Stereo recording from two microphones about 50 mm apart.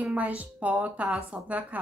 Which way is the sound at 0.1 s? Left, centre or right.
Right.